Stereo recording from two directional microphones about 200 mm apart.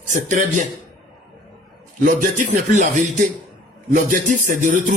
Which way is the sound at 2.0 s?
40° right (ahead or behind).